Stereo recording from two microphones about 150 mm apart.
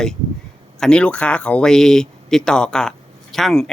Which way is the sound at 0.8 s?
5° left (ahead or behind).